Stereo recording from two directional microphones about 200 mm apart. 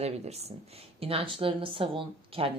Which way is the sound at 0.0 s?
30° right (ahead or behind).